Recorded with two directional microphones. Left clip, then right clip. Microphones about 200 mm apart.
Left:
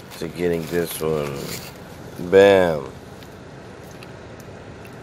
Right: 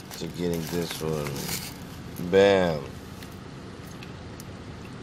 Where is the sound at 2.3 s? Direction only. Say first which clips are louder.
Left 7 dB; 15° left (ahead or behind).